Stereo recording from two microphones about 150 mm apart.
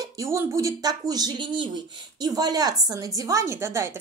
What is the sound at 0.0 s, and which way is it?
A woman's voice, 20° right (ahead or behind).